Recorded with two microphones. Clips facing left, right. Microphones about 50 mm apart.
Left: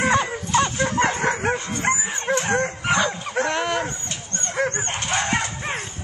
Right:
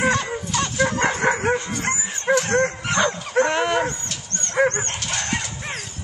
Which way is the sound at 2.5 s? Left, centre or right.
Centre.